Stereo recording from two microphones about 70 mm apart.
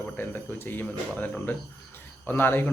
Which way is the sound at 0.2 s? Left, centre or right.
Left.